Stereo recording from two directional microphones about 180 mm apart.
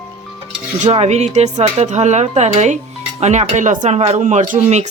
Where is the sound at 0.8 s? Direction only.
35° right (ahead or behind).